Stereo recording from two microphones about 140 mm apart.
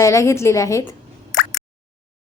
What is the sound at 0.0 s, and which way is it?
Speech, 20° left (ahead or behind).